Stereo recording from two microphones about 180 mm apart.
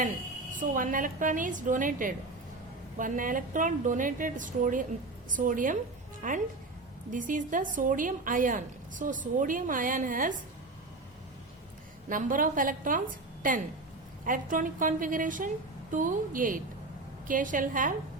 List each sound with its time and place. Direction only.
0.5 s a woman's voice: 50° right (ahead or behind)
12.0 s a woman's voice: 50° right (ahead or behind)
14.3 s a woman's voice: 50° right (ahead or behind)